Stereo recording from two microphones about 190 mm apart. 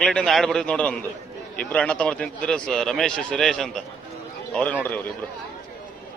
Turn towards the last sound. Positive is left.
turn(degrees=10)  # may be behind; listen again after turning